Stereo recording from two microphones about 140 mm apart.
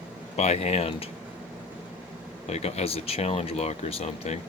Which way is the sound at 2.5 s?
50° left (ahead or behind).